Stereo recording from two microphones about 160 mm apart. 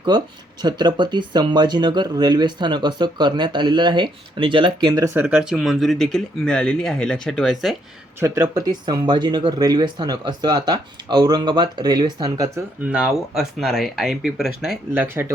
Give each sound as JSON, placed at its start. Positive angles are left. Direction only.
{"t": 0.1, "sound": "speech", "side_deg": -25}
{"t": 5.2, "sound": "speech", "side_deg": -5}
{"t": 8.2, "sound": "speech", "side_deg": -20}
{"t": 12.8, "sound": "speech", "side_deg": -5}
{"t": 15.0, "sound": "speech", "side_deg": -15}